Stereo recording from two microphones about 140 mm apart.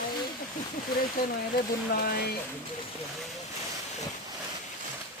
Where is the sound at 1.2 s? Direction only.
90° left.